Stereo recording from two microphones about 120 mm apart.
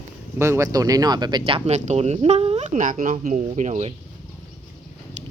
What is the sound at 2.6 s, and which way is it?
Speech, 90° right.